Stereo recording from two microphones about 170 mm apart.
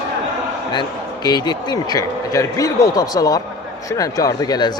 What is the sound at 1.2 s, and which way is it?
Speech, 25° left (ahead or behind).